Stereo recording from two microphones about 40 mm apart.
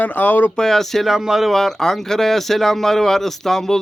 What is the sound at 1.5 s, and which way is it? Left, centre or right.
Speech, centre.